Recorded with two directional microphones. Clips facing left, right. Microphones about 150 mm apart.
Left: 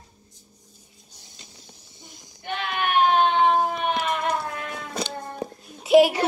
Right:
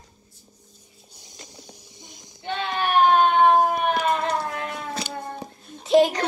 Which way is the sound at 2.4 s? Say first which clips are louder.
Right 1 dB; 30° right (ahead or behind).